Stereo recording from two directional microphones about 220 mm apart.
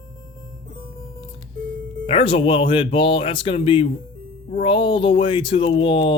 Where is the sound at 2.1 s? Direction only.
25° left (ahead or behind).